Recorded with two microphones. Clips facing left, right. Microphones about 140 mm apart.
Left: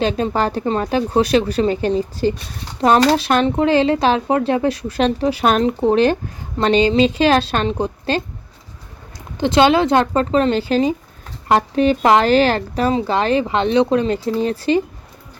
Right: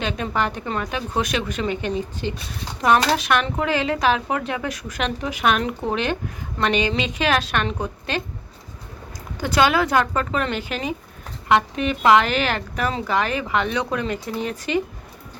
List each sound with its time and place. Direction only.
0.0 s speech: 35° left (ahead or behind)
9.4 s a woman's voice: 25° left (ahead or behind)